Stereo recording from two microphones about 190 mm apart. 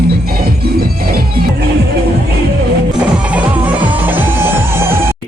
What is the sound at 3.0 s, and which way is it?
Music, 5° right (ahead or behind).